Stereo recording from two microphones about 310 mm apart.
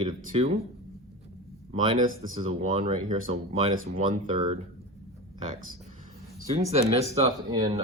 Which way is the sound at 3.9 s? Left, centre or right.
Right.